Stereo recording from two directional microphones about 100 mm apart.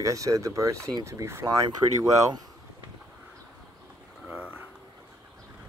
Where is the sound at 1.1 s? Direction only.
25° right (ahead or behind).